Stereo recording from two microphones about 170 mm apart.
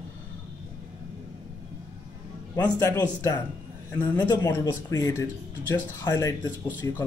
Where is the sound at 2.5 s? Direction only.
15° left (ahead or behind).